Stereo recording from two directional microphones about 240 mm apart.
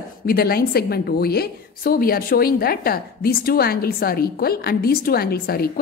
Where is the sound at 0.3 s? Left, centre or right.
Left.